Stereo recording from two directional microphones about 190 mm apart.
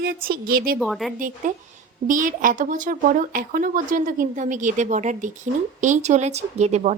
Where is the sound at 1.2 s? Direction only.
45° right (ahead or behind).